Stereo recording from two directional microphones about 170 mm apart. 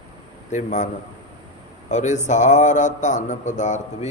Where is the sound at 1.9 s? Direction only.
45° left (ahead or behind).